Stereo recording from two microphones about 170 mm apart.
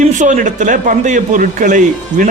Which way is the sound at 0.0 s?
45° right (ahead or behind).